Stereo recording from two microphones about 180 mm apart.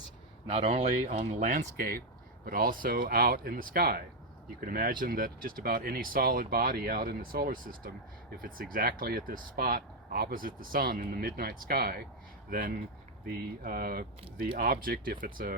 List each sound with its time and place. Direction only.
0.4 s speech: 35° right (ahead or behind); by 15.5 s 50° right (ahead or behind)